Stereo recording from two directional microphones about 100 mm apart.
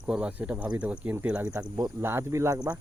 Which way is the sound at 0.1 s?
15° right (ahead or behind).